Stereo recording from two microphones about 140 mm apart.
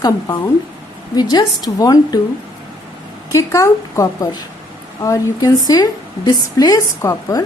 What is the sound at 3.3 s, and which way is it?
A woman's voice, 20° left (ahead or behind).